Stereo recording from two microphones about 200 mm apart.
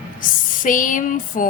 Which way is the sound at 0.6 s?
40° left (ahead or behind).